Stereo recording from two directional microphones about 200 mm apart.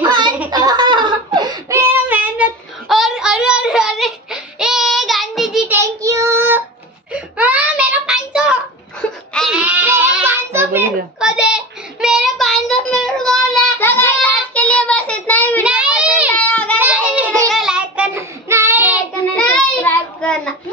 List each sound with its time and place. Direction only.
0.0 s giggle: 20° right (ahead or behind); by 5.8 s centre (ahead or behind)
5.8 s child singing: 15° right (ahead or behind)
7.1 s a sound: 5° right (ahead or behind)
9.3 s bleat: centre (ahead or behind)
15.6 s child singing: 5° right (ahead or behind)
16.3 s child singing: 5° left (ahead or behind)
16.7 s a sound: 10° right (ahead or behind)
17.5 s child singing: centre (ahead or behind)
19.3 s child singing: 5° left (ahead or behind)